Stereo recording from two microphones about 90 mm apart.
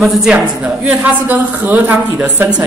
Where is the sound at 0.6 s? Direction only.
15° right (ahead or behind).